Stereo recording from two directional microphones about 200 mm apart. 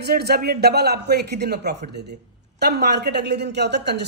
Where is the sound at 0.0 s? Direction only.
50° right (ahead or behind).